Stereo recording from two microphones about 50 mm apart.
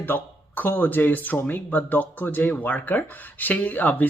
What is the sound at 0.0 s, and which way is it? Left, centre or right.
Speech, left.